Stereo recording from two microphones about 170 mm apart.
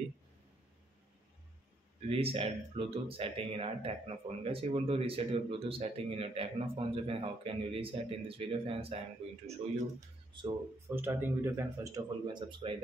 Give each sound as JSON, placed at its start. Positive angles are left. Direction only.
{"t": 2.0, "sound": "speech", "side_deg": -35}
{"t": 11.0, "sound": "speech", "side_deg": -15}